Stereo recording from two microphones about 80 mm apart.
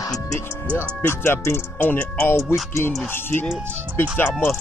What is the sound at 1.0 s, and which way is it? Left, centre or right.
Speech, left.